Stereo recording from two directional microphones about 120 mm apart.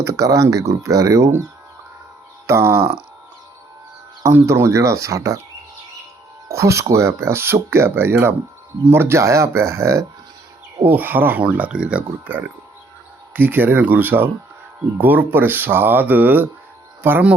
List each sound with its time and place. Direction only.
0.0 s speech: 30° right (ahead or behind)
2.5 s speech: 20° right (ahead or behind)
4.2 s speech: 20° right (ahead or behind)
6.5 s speech: 25° right (ahead or behind)